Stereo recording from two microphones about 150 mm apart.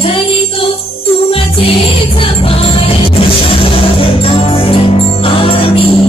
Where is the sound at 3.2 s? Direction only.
35° left (ahead or behind).